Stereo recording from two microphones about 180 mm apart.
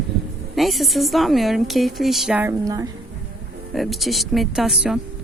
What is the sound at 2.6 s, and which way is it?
Speech, 20° right (ahead or behind).